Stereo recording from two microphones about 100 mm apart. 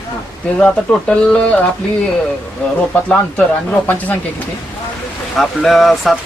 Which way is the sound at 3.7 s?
15° left (ahead or behind).